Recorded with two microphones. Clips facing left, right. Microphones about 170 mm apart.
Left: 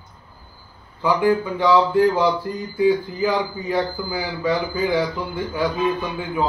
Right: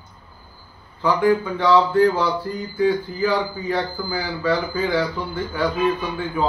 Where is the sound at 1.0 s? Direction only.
10° left (ahead or behind).